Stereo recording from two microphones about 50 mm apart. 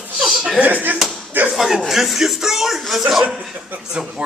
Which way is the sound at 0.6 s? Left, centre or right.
Right.